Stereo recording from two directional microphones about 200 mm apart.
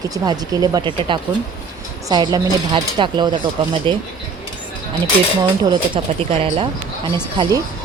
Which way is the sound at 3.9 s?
10° left (ahead or behind).